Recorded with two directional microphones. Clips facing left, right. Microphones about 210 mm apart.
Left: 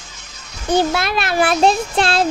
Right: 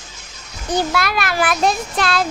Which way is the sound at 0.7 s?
25° left (ahead or behind).